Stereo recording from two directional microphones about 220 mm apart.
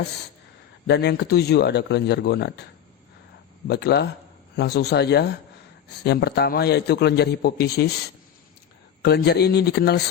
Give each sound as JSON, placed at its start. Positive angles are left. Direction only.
{"t": 0.9, "sound": "a man's voice", "side_deg": 50}
{"t": 3.7, "sound": "a man's voice", "side_deg": 50}
{"t": 9.0, "sound": "a man's voice", "side_deg": 50}